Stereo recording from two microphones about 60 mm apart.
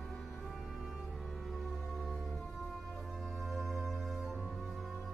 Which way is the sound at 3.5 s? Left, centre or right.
Centre.